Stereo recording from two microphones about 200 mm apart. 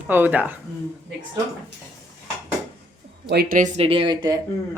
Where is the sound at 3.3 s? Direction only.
50° right (ahead or behind); by 4.4 s 20° right (ahead or behind).